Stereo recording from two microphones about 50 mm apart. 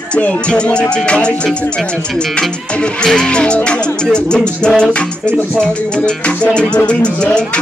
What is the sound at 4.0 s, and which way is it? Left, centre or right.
Music, centre.